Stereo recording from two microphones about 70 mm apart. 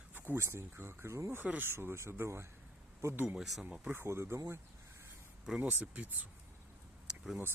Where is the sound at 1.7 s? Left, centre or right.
Right.